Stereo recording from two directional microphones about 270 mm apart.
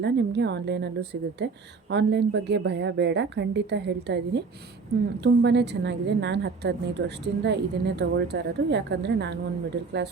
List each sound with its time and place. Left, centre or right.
0.0 s a woman's voice: right